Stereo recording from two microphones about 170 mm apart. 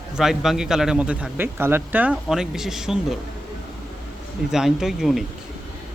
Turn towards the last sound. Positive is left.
turn(degrees=0)  # may be behind; listen again after turning